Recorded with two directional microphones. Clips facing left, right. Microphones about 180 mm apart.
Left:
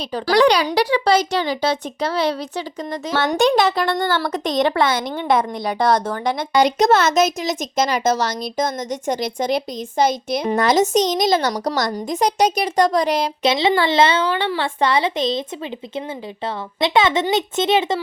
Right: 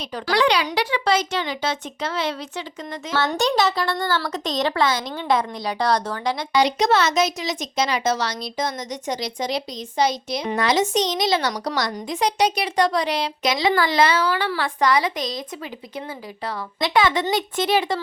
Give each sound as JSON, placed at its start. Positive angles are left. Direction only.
{"t": 0.1, "sound": "speech", "side_deg": 35}
{"t": 3.2, "sound": "a woman's voice", "side_deg": 55}
{"t": 13.4, "sound": "a woman's voice", "side_deg": 25}
{"t": 16.8, "sound": "a woman's voice", "side_deg": 25}